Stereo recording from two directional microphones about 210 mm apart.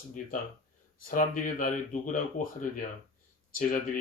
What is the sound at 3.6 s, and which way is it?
Speech, 40° left (ahead or behind).